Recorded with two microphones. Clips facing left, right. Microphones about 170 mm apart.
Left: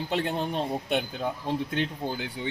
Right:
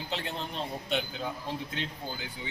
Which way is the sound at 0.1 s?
55° left (ahead or behind).